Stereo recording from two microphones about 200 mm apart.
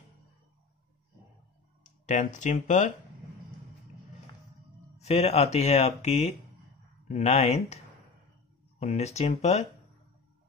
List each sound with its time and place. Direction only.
1.8 s speech: 40° left (ahead or behind)
4.9 s speech: 35° left (ahead or behind)